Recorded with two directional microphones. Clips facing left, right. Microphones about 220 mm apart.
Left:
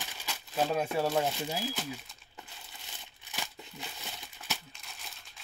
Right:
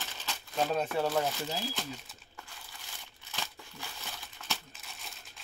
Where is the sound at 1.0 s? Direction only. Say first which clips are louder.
Left 1 dB; 20° left (ahead or behind).